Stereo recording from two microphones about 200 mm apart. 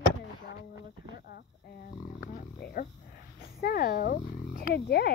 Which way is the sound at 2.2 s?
45° left (ahead or behind).